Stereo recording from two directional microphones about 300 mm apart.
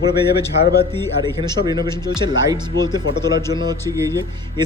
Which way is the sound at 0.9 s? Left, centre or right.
Centre.